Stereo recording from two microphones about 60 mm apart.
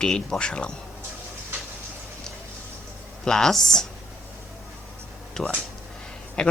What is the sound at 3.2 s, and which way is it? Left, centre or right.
Speech, centre.